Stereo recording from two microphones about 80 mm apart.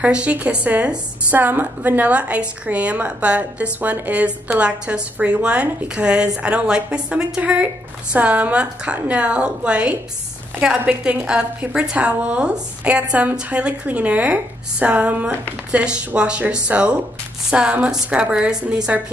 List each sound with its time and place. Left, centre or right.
0.0 s a woman's voice: centre